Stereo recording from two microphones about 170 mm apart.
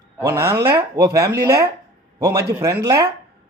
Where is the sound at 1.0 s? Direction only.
70° right (ahead or behind).